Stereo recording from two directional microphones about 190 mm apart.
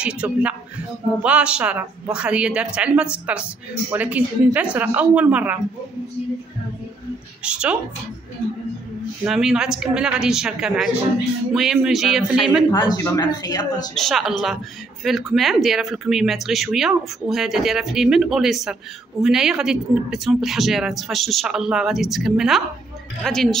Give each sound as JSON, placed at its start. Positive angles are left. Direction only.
{"t": 0.0, "sound": "a woman's voice", "side_deg": -5}
{"t": 7.4, "sound": "speech", "side_deg": -5}
{"t": 9.2, "sound": "speech", "side_deg": -5}
{"t": 12.7, "sound": "a woman's voice", "side_deg": 20}
{"t": 13.9, "sound": "speech", "side_deg": 0}